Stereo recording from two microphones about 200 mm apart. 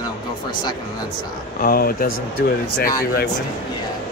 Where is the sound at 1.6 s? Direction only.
45° left (ahead or behind).